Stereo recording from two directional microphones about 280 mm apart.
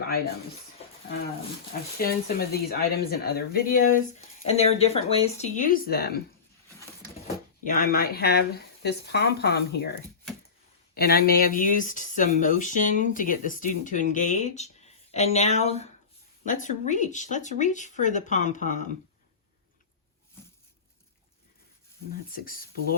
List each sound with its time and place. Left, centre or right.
2.0 s speech: left
7.6 s speech: left
10.9 s speech: left
22.3 s speech: left